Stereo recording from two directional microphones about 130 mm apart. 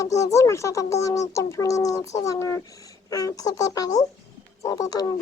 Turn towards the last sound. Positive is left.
turn(degrees=30)  # may be behind; listen again after turning